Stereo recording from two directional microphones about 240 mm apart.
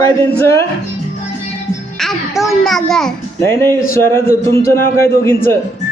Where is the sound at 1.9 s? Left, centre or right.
Centre.